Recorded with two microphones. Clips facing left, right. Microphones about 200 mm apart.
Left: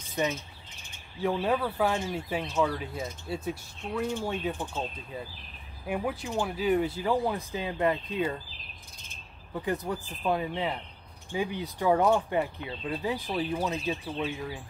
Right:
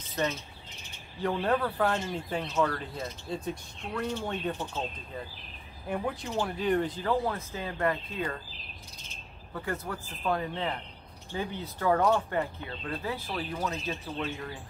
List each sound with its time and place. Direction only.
0.1 s speech: 15° left (ahead or behind)
9.5 s speech: 15° left (ahead or behind)